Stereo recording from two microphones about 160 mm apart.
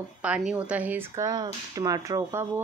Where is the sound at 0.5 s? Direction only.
10° right (ahead or behind).